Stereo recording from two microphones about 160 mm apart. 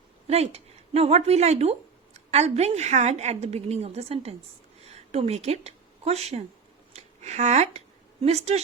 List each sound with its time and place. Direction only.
0.3 s a woman's voice: 40° right (ahead or behind)
6.9 s a sound: 45° right (ahead or behind)
8.2 s a woman's voice: 40° right (ahead or behind)